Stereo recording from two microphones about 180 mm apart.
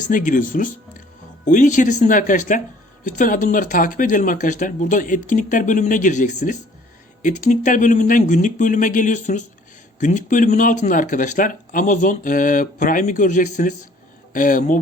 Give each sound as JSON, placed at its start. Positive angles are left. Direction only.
{"t": 0.0, "sound": "speech", "side_deg": 45}